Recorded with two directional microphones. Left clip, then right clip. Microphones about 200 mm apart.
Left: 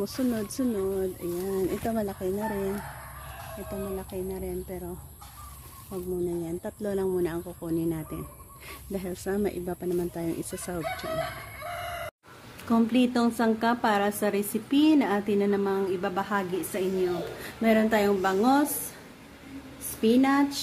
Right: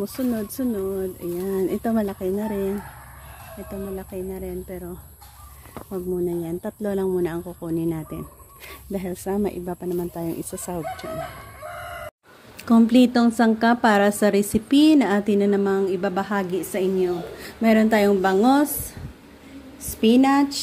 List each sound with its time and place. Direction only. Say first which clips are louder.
0.3 s speech: right 3 dB; 5° right (ahead or behind)
1.4 s a woman's voice: right 5 dB; 30° right (ahead or behind)
4.1 s a woman's voice: right 3 dB; 20° right (ahead or behind)
5.9 s a woman's voice: right 5 dB; 30° right (ahead or behind); by 10.8 s 10° right (ahead or behind)
12.6 s a woman's voice: right 8 dB; 20° right (ahead or behind)
20.0 s a woman's voice: right 5 dB; 25° right (ahead or behind)